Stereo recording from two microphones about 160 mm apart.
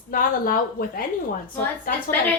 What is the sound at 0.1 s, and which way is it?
Speech, 60° left (ahead or behind).